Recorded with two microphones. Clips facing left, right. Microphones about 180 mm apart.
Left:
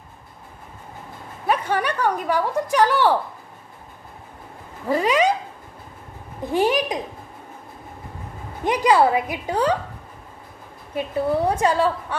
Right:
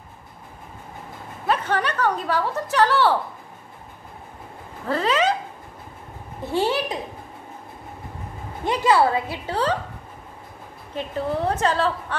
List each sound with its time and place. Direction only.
1.5 s a woman's voice: 10° left (ahead or behind)
4.8 s a sound: 15° left (ahead or behind)
6.4 s a woman's voice: 15° left (ahead or behind)
8.6 s a woman's voice: 15° left (ahead or behind)
11.0 s a woman's voice: 10° left (ahead or behind)